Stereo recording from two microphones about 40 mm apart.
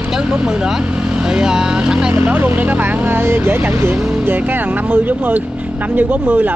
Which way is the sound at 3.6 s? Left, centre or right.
Right.